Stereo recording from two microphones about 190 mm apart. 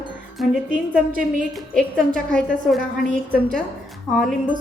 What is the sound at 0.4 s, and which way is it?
Speech, centre (ahead or behind).